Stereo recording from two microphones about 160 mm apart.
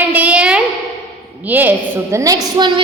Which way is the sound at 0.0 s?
10° right (ahead or behind).